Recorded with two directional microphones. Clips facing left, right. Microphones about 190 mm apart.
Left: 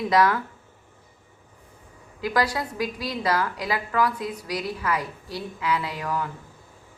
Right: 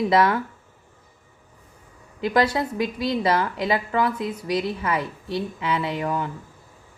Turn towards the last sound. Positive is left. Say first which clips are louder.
# right 4 dB
turn(degrees=-25)  # may be behind; listen again after turning